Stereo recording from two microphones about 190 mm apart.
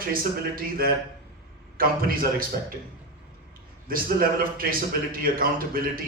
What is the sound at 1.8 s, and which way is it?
Speech, 50° right (ahead or behind).